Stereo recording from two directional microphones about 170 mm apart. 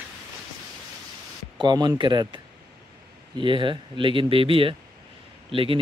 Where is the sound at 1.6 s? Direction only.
25° right (ahead or behind).